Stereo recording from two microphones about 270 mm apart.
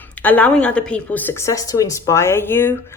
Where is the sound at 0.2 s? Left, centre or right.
Centre.